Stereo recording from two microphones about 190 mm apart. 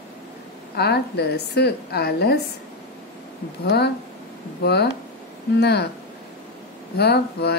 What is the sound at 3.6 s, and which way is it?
Speech, 60° left (ahead or behind).